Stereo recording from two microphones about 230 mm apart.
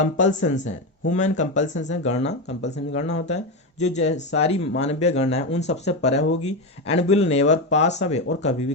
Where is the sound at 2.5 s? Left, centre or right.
Left.